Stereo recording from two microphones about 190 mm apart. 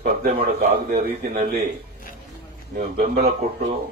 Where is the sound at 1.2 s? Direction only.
50° right (ahead or behind).